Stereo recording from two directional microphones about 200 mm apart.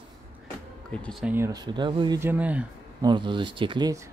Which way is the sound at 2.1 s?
10° right (ahead or behind).